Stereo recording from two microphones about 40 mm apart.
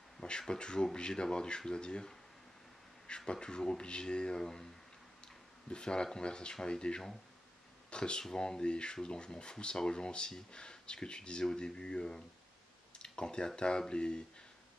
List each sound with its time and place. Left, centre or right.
0.2 s speech: left
3.3 s speech: left
13.0 s a sound: centre
13.6 s speech: centre